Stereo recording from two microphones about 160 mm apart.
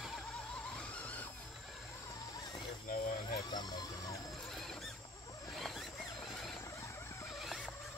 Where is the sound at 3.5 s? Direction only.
25° left (ahead or behind).